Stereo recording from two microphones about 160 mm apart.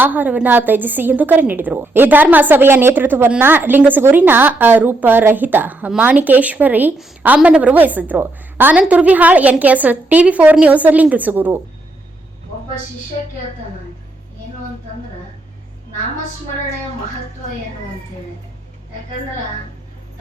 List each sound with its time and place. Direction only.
0.0 s a woman's voice: 10° right (ahead or behind)